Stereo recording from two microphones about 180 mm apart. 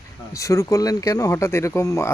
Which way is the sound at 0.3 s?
15° left (ahead or behind).